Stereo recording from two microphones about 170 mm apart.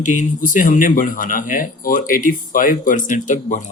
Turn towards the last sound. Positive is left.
turn(degrees=45)  # may be behind; listen again after turning